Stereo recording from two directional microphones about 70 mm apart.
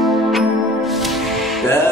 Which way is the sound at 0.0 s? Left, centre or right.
Centre.